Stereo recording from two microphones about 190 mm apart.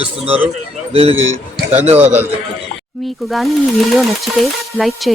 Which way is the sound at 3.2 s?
Centre (ahead or behind).